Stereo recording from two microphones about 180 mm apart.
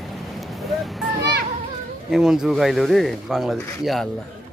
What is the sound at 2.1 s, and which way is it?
Speech, 5° right (ahead or behind).